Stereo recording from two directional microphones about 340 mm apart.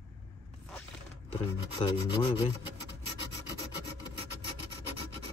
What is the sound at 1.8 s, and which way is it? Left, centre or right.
Speech, centre.